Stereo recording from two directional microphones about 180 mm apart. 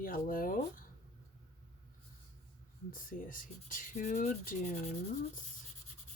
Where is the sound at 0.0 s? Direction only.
50° left (ahead or behind).